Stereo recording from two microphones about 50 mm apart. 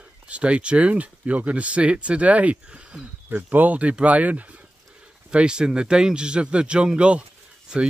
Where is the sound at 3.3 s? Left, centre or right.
Right.